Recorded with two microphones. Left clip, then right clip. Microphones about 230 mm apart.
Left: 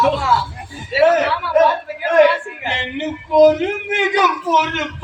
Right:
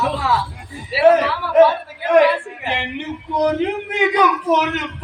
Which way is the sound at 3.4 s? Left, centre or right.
Left.